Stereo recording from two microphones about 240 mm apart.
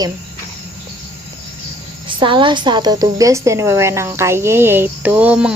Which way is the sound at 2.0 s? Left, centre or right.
Right.